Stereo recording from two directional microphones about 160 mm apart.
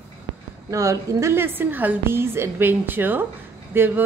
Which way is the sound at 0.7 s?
20° right (ahead or behind).